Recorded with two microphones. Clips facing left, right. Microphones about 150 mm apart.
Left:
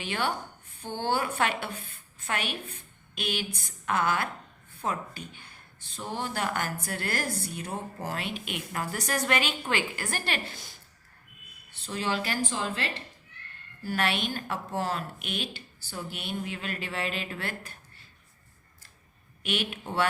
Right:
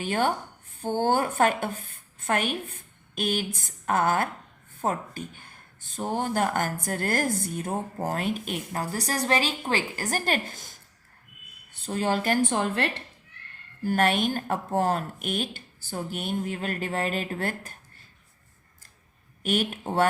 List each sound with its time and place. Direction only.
0.0 s a woman's voice: 45° right (ahead or behind)
13.8 s speech: 45° right (ahead or behind)
19.4 s speech: 45° right (ahead or behind)